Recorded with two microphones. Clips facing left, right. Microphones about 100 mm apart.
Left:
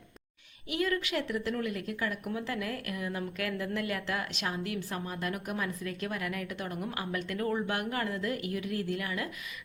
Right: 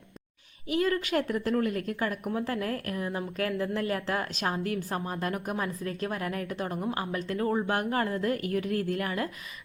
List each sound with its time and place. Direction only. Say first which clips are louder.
0.7 s a woman's voice: right 4 dB; 40° right (ahead or behind)